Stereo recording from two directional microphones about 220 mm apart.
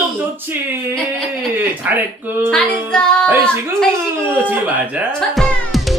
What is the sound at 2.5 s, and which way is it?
Music, 5° left (ahead or behind).